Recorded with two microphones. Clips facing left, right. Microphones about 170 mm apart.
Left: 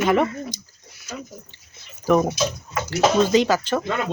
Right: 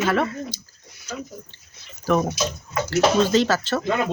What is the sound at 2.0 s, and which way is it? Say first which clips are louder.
A woman's voice: left 3 dB; 15° left (ahead or behind).